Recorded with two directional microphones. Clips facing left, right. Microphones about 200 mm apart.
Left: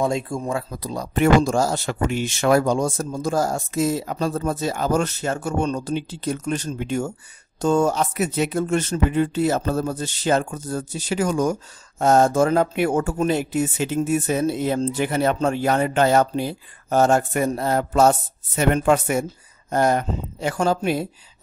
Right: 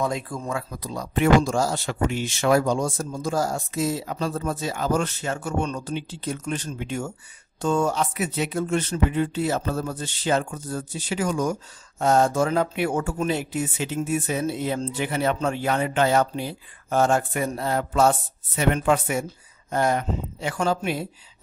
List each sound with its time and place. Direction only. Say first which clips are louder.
0.0 s speech: left 4 dB; 25° left (ahead or behind); by 21.1 s 40° left (ahead or behind)